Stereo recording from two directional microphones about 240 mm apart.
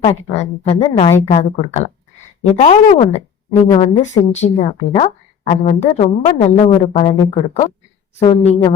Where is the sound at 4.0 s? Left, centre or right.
Left.